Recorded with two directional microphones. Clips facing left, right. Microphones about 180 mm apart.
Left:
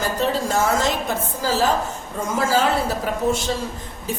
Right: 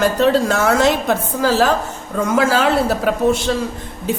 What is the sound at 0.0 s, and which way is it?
A woman's voice, 70° right (ahead or behind).